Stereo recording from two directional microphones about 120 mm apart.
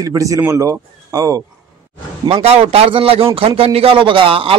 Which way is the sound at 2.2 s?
60° right (ahead or behind).